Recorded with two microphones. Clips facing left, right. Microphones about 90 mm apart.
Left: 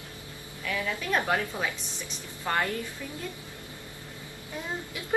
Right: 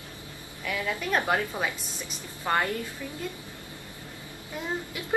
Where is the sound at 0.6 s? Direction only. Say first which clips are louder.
Right 1 dB; 5° right (ahead or behind).